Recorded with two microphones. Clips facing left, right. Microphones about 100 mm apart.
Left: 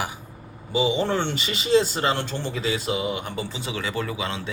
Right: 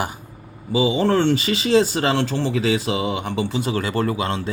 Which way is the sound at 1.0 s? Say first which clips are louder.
Right 7 dB; 90° right.